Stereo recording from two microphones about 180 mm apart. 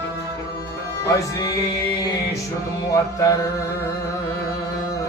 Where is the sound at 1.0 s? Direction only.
20° left (ahead or behind).